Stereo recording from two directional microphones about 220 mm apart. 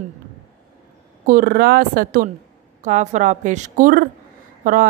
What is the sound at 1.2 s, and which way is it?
A woman's voice, 40° right (ahead or behind).